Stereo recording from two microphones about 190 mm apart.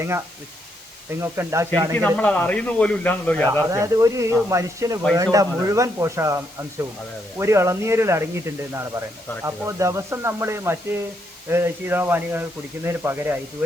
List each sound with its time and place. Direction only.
1.2 s speech: 15° right (ahead or behind)
2.0 s speech: 5° left (ahead or behind)
3.7 s speech: 15° right (ahead or behind)